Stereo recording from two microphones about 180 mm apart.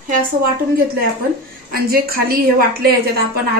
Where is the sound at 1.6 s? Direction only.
55° right (ahead or behind).